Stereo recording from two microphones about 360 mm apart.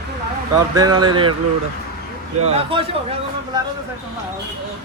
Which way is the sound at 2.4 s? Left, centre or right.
Centre.